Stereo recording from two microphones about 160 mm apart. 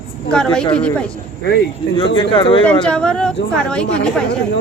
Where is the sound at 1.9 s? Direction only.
30° left (ahead or behind).